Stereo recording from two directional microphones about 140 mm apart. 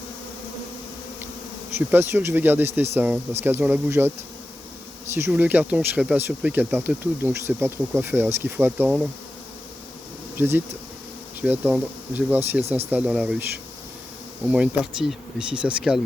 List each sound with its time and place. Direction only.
1.9 s speech: 15° right (ahead or behind)
5.3 s speech: 10° right (ahead or behind)
10.3 s bee: 15° right (ahead or behind)
11.3 s speech: 10° right (ahead or behind)
14.4 s speech: 10° right (ahead or behind)